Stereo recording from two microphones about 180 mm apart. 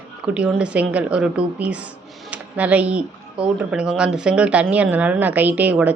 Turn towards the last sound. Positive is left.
turn(degrees=-10)  # may be behind; listen again after turning